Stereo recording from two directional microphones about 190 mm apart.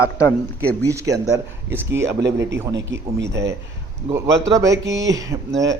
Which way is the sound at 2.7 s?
65° right (ahead or behind).